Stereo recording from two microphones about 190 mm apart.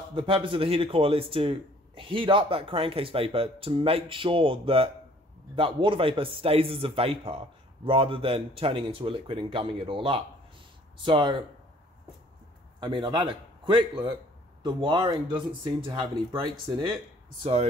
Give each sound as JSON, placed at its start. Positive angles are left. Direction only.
{"t": 0.1, "sound": "speech", "side_deg": -25}
{"t": 12.8, "sound": "speech", "side_deg": -25}